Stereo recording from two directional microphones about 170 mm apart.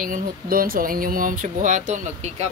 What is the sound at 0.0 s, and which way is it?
Speech, 55° right (ahead or behind).